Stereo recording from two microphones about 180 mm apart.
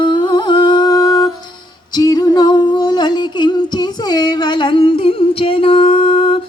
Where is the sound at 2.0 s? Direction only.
20° left (ahead or behind).